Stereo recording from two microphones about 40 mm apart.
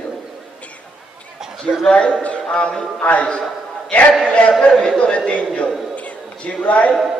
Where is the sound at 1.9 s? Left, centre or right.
Left.